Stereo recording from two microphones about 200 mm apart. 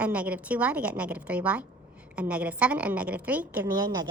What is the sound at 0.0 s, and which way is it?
A woman's voice, 5° right (ahead or behind).